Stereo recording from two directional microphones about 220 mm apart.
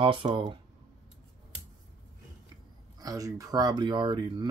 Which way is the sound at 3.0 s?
15° right (ahead or behind).